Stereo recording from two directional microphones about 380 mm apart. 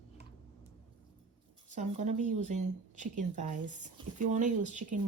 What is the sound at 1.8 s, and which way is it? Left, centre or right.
Speech, centre.